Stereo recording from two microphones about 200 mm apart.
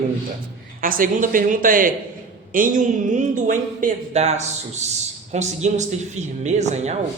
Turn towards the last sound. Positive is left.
turn(degrees=-35)  # may be behind; listen again after turning